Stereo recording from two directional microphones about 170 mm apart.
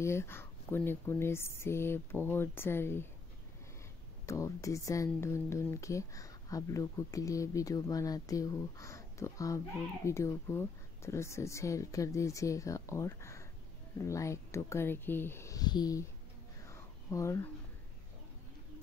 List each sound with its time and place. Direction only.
0.0 s speech: 15° left (ahead or behind)
4.3 s speech: 20° left (ahead or behind)
16.6 s a sound: 15° left (ahead or behind)